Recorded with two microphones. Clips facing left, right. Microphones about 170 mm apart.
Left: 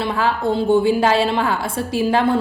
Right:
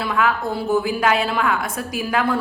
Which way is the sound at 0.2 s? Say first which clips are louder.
Left 2 dB; 30° left (ahead or behind).